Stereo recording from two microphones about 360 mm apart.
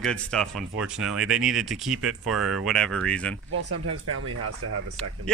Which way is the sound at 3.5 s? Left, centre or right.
Right.